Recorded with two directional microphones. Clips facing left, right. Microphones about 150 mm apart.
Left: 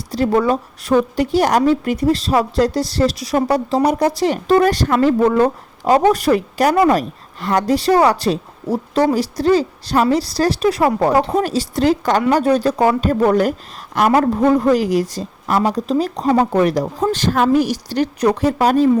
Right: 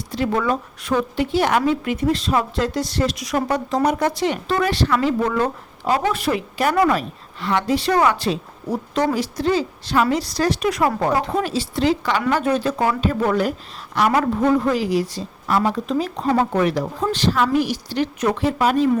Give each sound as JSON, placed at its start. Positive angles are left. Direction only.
{"t": 0.1, "sound": "a woman's voice", "side_deg": 35}